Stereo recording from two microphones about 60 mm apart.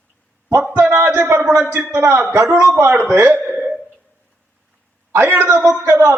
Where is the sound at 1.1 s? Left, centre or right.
Right.